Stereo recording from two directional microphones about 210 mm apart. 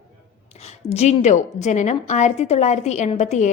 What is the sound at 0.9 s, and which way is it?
A woman's voice, 30° left (ahead or behind).